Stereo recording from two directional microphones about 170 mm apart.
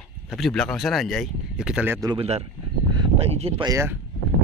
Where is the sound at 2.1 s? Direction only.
35° right (ahead or behind).